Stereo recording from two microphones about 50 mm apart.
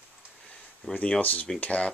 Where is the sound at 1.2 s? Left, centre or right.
Left.